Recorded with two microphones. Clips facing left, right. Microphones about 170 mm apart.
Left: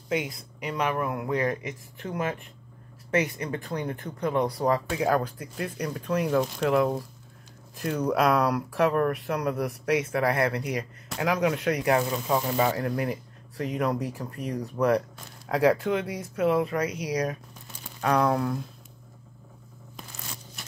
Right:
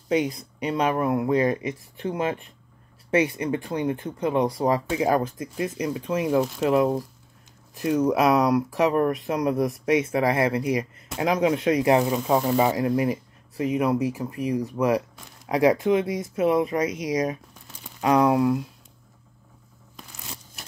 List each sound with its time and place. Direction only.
0.1 s speech: 30° right (ahead or behind)
6.4 s speech: 5° right (ahead or behind)
6.7 s speech: 15° right (ahead or behind)